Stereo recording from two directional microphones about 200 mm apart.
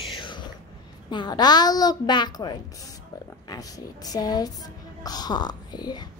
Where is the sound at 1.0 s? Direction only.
20° left (ahead or behind).